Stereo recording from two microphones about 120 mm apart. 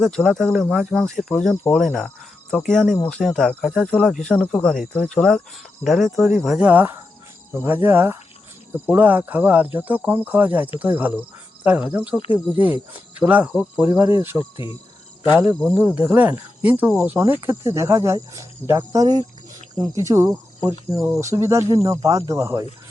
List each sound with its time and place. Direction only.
0.0 s speech: centre (ahead or behind)
1.7 s cricket: 5° left (ahead or behind)
2.6 s speech: 5° left (ahead or behind); by 14.3 s 20° right (ahead or behind)
14.3 s speech: 45° left (ahead or behind)
15.7 s speech: 15° right (ahead or behind)
17.4 s speech: 25° right (ahead or behind)
18.8 s speech: 35° right (ahead or behind)